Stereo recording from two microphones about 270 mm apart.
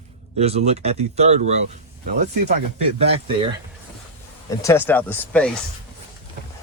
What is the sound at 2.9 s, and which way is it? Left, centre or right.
Speech, right.